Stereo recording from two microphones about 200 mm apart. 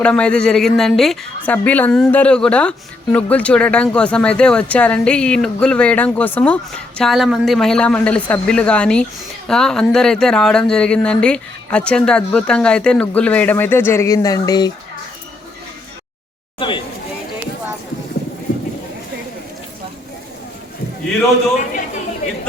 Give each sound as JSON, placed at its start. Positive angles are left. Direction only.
{"t": 0.0, "sound": "a woman's voice", "side_deg": 5}
{"t": 16.6, "sound": "speech", "side_deg": 25}
{"t": 21.6, "sound": "speech", "side_deg": 40}